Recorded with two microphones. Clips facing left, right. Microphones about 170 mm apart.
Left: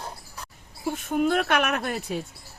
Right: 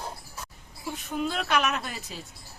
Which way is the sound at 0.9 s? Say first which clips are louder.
Left 7 dB; 55° left (ahead or behind).